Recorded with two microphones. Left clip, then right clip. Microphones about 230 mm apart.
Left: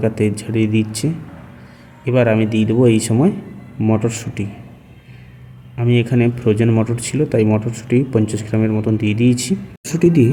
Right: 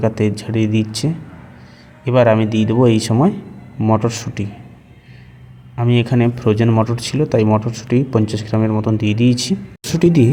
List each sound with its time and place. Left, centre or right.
0.0 s speech: centre
5.7 s speech: centre